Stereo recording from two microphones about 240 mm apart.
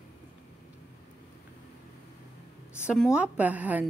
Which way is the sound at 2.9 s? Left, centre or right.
Centre.